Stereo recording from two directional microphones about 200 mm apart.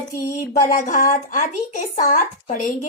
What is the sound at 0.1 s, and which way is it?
A woman's voice, 45° left (ahead or behind).